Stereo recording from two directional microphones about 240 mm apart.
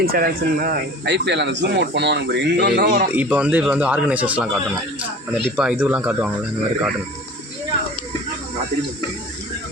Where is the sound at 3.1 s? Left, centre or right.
Centre.